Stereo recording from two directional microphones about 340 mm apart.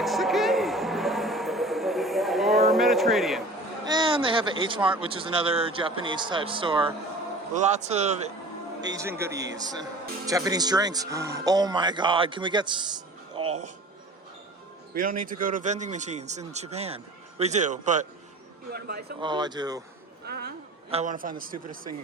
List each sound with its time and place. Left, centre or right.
0.0 s music: centre
3.8 s a man's voice: centre
13.3 s music: centre
15.2 s speech: right
19.2 s a man's voice: centre
20.2 s speech: right